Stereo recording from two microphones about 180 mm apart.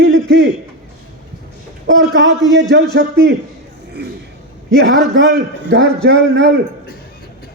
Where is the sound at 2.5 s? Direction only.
75° right (ahead or behind).